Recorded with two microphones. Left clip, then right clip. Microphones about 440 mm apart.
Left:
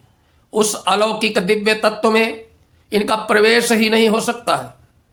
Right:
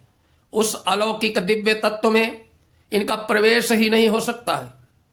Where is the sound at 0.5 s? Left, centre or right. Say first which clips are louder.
Left 4 dB; right.